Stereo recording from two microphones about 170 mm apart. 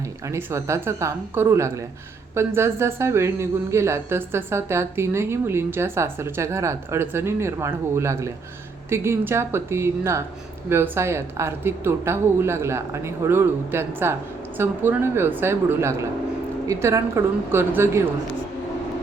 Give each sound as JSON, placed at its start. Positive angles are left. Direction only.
{"t": 0.3, "sound": "a woman's voice", "side_deg": -15}